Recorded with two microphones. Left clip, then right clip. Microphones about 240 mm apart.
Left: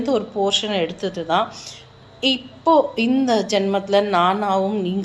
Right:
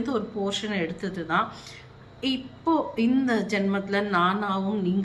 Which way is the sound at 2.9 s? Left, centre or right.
Centre.